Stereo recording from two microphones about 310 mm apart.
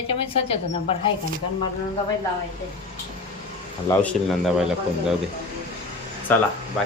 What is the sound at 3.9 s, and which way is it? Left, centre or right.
Speech, centre.